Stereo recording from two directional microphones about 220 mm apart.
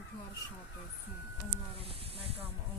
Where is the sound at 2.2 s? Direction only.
25° right (ahead or behind).